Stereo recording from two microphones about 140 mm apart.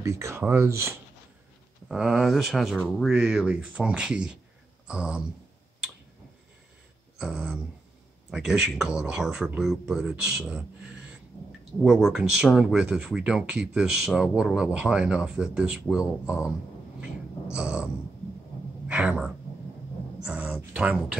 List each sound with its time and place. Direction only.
0.0 s speech: 20° right (ahead or behind)
1.9 s speech: 5° right (ahead or behind)
7.2 s speech: 5° right (ahead or behind)
11.8 s speech: 5° right (ahead or behind)
17.0 s dog: 10° right (ahead or behind)
18.9 s speech: 10° right (ahead or behind)